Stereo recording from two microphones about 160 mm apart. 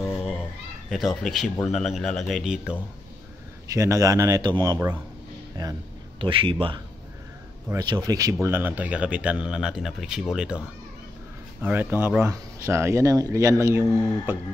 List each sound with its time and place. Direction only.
0.8 s speech: centre (ahead or behind)
3.7 s a man's voice: 20° right (ahead or behind); by 10.6 s 5° right (ahead or behind)
11.6 s speech: 10° right (ahead or behind)